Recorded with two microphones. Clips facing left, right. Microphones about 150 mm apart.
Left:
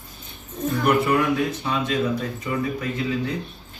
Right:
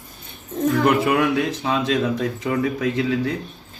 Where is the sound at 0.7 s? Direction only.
90° right.